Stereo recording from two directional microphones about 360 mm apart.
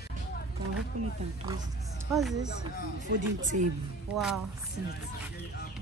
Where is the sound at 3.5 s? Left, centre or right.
Right.